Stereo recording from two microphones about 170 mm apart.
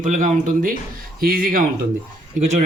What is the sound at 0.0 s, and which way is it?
Speech, 50° right (ahead or behind).